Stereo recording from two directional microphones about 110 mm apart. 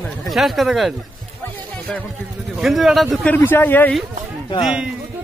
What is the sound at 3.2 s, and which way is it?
Speech, 15° left (ahead or behind).